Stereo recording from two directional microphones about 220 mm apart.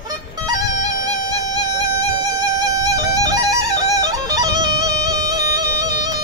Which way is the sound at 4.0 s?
15° right (ahead or behind).